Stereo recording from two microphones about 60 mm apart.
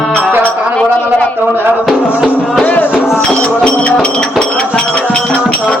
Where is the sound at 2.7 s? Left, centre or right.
Left.